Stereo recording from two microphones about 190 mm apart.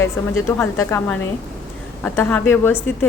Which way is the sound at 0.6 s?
15° left (ahead or behind).